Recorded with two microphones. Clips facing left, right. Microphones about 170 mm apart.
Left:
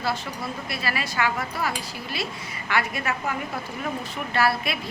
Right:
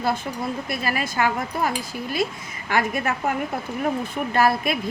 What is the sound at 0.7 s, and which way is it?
A woman's voice, 45° right (ahead or behind).